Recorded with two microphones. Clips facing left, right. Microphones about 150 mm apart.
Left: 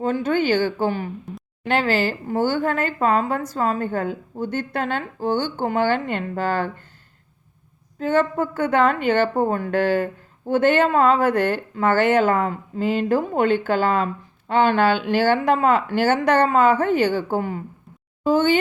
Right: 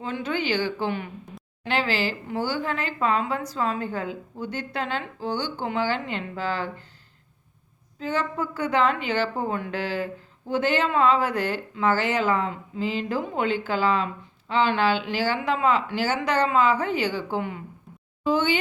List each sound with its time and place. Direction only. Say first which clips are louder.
0.0 s speech: left 7 dB; 45° left (ahead or behind)
7.9 s speech: left 7 dB; 55° left (ahead or behind)